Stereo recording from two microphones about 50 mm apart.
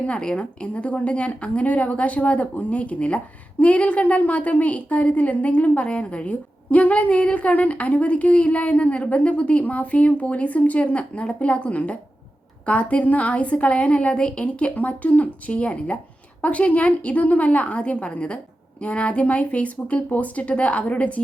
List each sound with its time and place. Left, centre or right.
0.1 s a woman's voice: left